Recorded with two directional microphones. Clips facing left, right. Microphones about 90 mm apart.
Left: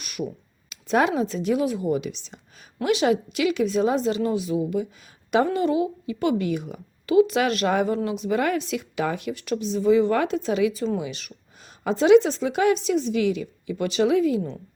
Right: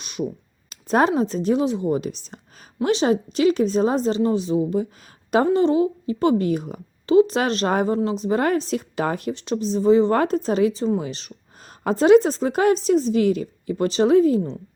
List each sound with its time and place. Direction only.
0.0 s a sound: 25° right (ahead or behind)
0.7 s a sound: 40° right (ahead or behind)
1.1 s speech: 35° right (ahead or behind)
2.0 s speech: 40° right (ahead or behind)
9.3 s speech: 25° right (ahead or behind)
11.8 s speech: 45° right (ahead or behind)